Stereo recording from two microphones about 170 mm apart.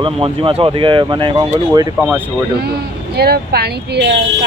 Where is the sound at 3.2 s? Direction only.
70° right (ahead or behind).